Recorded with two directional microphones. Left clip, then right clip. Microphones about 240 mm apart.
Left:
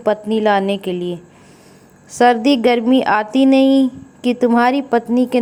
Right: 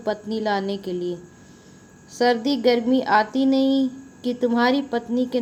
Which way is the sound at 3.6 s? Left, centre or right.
Left.